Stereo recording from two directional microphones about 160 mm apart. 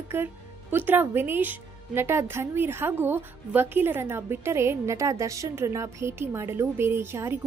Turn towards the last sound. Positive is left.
turn(degrees=-15)  # may be behind; listen again after turning